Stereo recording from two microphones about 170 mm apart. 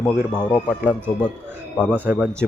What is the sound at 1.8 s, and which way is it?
Speech, 5° left (ahead or behind).